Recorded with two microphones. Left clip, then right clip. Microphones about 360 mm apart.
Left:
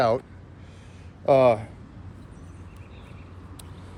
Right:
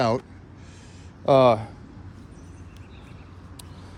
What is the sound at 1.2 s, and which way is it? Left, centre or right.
Speech, right.